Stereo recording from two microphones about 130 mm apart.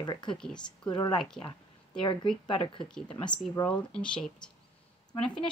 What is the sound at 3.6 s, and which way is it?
Speech, 10° left (ahead or behind).